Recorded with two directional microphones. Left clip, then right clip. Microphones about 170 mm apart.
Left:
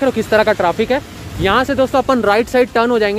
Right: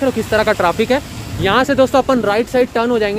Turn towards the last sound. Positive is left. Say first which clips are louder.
# left 2 dB
turn(degrees=20)  # may be behind; listen again after turning